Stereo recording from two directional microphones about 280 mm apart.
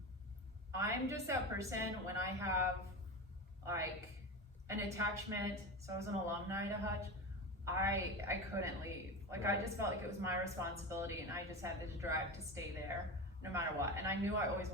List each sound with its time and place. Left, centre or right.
0.7 s a woman's voice: centre
4.7 s a woman's voice: centre